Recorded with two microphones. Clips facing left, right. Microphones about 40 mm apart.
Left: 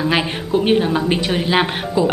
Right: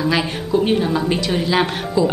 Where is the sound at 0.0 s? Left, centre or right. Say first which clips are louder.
Left 1 dB; left.